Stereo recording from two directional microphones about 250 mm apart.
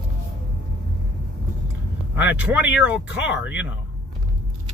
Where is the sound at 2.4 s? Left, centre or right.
Centre.